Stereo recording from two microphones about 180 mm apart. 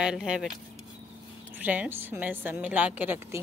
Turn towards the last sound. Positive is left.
turn(degrees=-10)  # may be behind; listen again after turning